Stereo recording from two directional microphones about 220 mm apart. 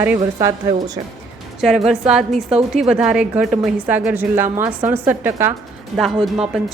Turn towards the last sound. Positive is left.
turn(degrees=0)  # may be behind; listen again after turning